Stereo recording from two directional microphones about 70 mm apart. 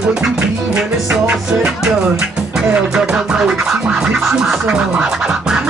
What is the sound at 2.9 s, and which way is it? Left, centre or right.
Music, centre.